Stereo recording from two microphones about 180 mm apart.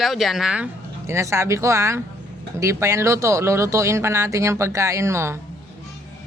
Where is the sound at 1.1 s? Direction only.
15° right (ahead or behind).